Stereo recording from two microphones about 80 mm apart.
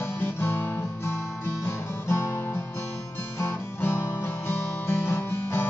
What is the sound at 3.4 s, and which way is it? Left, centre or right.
Music, left.